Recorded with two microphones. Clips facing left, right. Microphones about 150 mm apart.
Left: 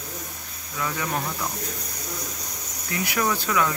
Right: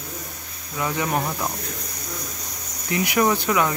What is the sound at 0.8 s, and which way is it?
Speech, 25° right (ahead or behind).